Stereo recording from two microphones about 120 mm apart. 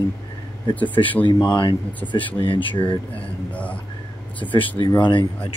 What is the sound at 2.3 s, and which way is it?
Speech, 45° left (ahead or behind).